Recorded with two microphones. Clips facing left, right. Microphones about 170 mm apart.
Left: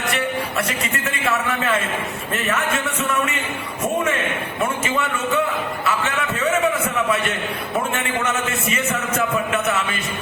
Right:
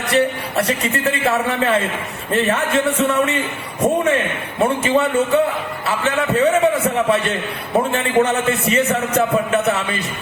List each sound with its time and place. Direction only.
0.1 s a man's voice: 35° right (ahead or behind)
4.6 s a man's voice: 35° right (ahead or behind)